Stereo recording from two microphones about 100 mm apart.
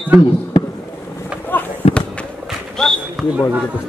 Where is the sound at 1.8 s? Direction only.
90° left.